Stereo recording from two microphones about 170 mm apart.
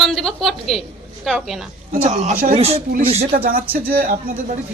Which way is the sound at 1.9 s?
40° right (ahead or behind).